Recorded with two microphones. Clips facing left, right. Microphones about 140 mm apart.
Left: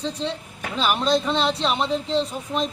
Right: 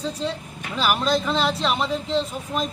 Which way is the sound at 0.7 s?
25° left (ahead or behind).